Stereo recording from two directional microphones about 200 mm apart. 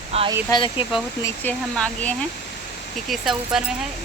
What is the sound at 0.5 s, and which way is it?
Speech, 25° left (ahead or behind).